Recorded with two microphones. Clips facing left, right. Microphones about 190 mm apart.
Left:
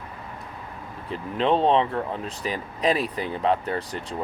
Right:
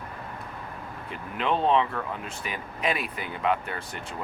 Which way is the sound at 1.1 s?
30° left (ahead or behind).